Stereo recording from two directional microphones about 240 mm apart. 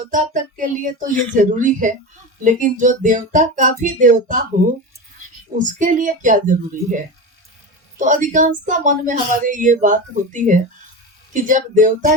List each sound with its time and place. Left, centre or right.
0.1 s speech: right
5.5 s speech: right
7.9 s speech: right